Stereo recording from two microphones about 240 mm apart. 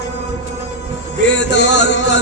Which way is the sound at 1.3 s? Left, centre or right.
Left.